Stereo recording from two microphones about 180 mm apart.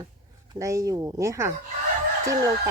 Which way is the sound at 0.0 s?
20° right (ahead or behind).